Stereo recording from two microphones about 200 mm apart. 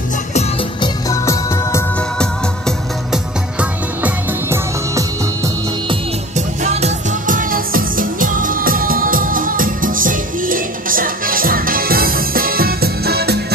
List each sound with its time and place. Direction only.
0.3 s music: 35° left (ahead or behind)
1.0 s music: 15° left (ahead or behind)
3.1 s music: 5° right (ahead or behind)
6.3 s music: 35° right (ahead or behind); by 13.4 s 55° right (ahead or behind)